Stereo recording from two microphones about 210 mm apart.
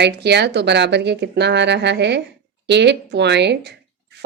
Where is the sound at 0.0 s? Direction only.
55° right (ahead or behind).